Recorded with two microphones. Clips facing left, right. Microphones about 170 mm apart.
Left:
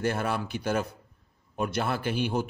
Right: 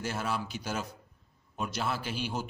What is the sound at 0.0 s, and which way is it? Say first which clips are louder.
A man's voice: left 5 dB; 55° left (ahead or behind).